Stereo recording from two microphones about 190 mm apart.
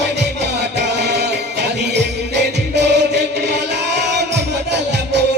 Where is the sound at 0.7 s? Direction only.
65° right (ahead or behind).